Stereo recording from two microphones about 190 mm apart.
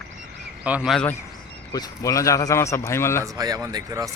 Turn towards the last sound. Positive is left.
turn(degrees=-20)  # may be behind; listen again after turning